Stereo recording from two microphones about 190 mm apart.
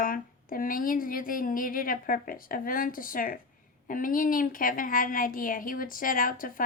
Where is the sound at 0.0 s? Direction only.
50° left (ahead or behind).